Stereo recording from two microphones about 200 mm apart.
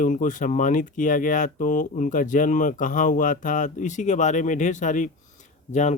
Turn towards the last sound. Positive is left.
turn(degrees=35)  # may be behind; listen again after turning